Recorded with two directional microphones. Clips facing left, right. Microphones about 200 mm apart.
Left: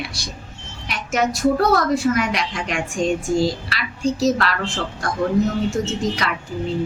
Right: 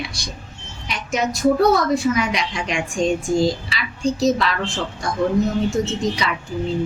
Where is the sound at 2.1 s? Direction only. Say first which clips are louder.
Even; centre (ahead or behind).